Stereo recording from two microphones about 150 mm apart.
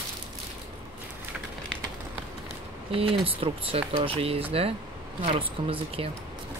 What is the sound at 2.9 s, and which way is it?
Speech, 35° right (ahead or behind).